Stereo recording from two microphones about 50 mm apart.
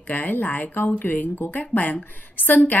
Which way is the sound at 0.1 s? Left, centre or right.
Left.